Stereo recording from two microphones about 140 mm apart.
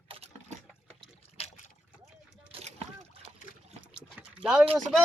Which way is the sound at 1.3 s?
50° left (ahead or behind).